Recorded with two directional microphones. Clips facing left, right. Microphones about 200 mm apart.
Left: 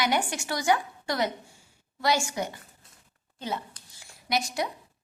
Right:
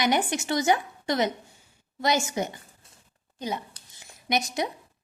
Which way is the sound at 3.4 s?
20° right (ahead or behind).